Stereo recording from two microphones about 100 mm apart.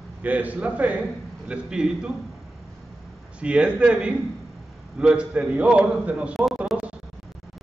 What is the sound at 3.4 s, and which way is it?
A man's voice, 10° right (ahead or behind).